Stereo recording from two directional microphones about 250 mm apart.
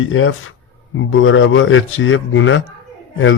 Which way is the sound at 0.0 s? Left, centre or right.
Left.